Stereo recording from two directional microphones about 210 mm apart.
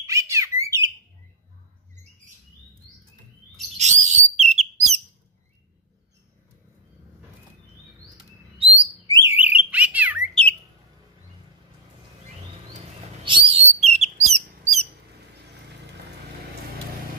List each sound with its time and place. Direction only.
0.0 s bird: 15° right (ahead or behind)
3.7 s bird: 35° right (ahead or behind)
8.2 s chirp: 25° right (ahead or behind)
9.2 s bird: 10° right (ahead or behind)
13.2 s bird: 25° right (ahead or behind)